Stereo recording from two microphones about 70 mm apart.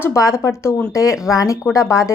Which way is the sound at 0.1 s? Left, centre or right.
Left.